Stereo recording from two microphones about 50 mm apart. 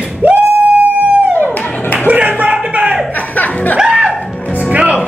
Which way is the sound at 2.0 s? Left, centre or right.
Right.